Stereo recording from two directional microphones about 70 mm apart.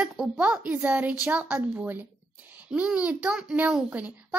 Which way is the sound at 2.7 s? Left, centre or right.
Centre.